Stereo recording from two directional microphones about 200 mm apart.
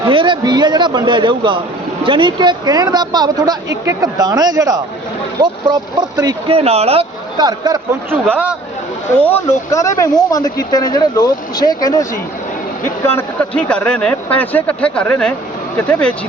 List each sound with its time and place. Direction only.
0.1 s speech: 25° right (ahead or behind)
6.6 s speech: 30° right (ahead or behind)
8.3 s speech: 5° right (ahead or behind)
9.2 s speech: 10° left (ahead or behind)
13.1 s speech: 10° left (ahead or behind)